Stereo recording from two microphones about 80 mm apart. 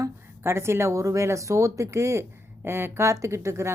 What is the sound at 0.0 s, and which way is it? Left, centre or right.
A woman's voice, right.